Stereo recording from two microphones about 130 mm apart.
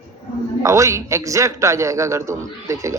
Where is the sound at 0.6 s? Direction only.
25° right (ahead or behind).